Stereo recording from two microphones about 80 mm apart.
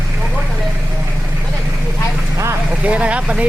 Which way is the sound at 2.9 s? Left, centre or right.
Centre.